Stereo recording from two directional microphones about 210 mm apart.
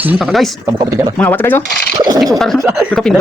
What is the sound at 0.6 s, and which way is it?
Speech, 15° right (ahead or behind).